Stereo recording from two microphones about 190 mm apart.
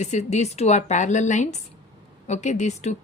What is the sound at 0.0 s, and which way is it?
A woman's voice, 35° left (ahead or behind).